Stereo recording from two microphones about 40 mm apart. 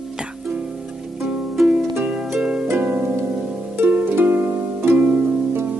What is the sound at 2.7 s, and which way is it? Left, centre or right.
Harp, right.